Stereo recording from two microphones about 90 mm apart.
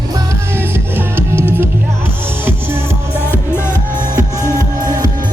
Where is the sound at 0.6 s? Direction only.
25° right (ahead or behind).